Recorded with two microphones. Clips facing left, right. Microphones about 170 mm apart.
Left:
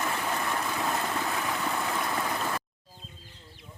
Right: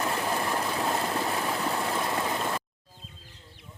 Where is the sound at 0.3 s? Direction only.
30° right (ahead or behind).